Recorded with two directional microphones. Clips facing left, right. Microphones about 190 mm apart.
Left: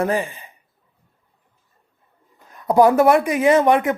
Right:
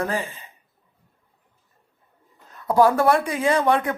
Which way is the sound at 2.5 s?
15° left (ahead or behind).